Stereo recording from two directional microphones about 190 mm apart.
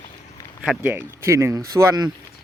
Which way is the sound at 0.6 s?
10° right (ahead or behind).